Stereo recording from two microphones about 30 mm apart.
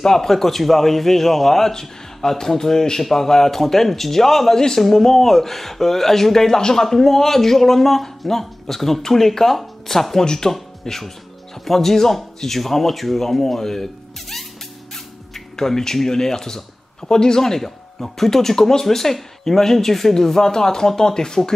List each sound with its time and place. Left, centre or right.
0.0 s speech: centre
10.2 s speech: centre
15.3 s speech: centre